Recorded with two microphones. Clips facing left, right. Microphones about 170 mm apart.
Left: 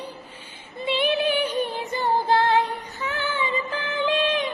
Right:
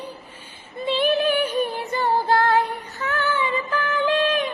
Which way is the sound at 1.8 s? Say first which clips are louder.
Right 1 dB; 20° left (ahead or behind).